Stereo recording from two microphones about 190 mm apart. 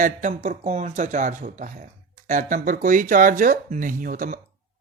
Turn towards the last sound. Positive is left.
turn(degrees=-45)  # may be behind; listen again after turning